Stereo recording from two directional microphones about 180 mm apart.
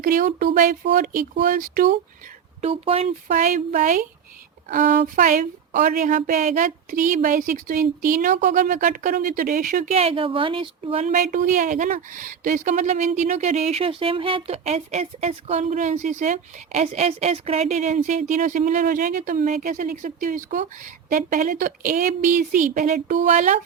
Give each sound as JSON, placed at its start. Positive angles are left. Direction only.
{"t": 0.0, "sound": "speech", "side_deg": -50}
{"t": 2.6, "sound": "speech", "side_deg": -35}
{"t": 3.2, "sound": "speech", "side_deg": -45}